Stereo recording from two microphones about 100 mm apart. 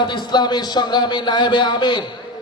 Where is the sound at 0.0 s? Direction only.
50° left (ahead or behind).